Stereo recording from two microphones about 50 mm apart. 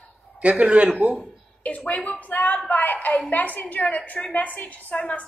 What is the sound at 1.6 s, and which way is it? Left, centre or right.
A woman's voice, left.